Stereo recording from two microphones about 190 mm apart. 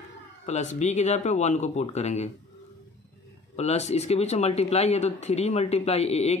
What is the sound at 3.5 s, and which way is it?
Speech, 35° left (ahead or behind).